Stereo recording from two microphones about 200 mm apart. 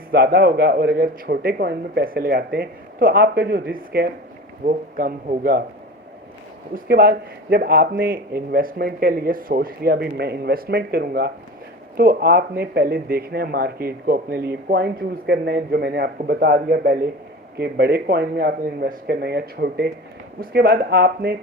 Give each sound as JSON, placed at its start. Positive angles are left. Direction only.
{"t": 0.1, "sound": "speech", "side_deg": -50}
{"t": 6.7, "sound": "speech", "side_deg": -50}